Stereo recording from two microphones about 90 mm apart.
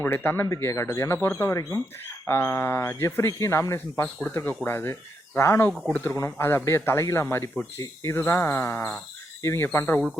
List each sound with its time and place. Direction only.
0.0 s speech: 20° left (ahead or behind)
0.4 s speech: 35° left (ahead or behind)
2.2 s speech: 25° left (ahead or behind)
4.0 s speech: 20° left (ahead or behind)
5.9 s speech: 15° left (ahead or behind)
6.1 s speech: 25° left (ahead or behind)